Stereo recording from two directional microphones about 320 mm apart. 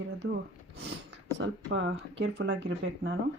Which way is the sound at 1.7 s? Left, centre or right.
Right.